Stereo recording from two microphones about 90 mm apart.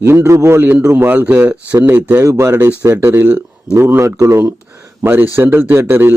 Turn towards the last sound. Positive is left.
turn(degrees=-25)  # may be behind; listen again after turning